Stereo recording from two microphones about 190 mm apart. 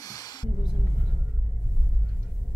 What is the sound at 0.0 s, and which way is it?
Music, 20° left (ahead or behind).